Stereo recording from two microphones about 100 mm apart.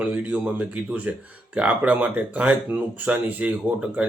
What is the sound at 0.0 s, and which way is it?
Speech, 15° right (ahead or behind).